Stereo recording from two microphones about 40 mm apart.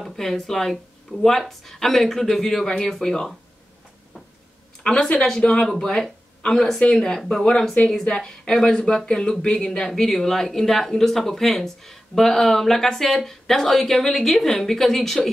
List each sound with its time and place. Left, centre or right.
0.0 s speech: centre
4.8 s speech: centre
8.6 s speech: left; by 15.2 s centre